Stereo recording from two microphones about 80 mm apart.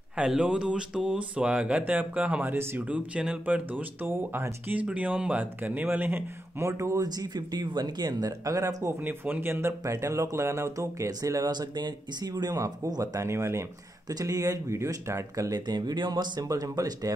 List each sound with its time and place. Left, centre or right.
0.2 s speech: centre
2.5 s speech: right
2.9 s speech: centre
6.7 s speech: right
7.1 s speech: right
9.0 s speech: right
11.5 s speech: right
14.0 s speech: right
15.6 s speech: right